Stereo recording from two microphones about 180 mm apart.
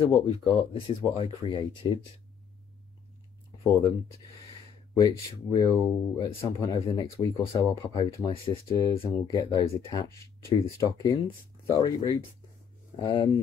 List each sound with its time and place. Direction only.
0.0 s speech: 30° left (ahead or behind)
4.9 s speech: 20° left (ahead or behind)